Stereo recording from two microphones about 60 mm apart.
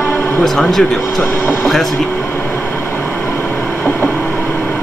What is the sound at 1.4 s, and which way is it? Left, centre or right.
Speech, left.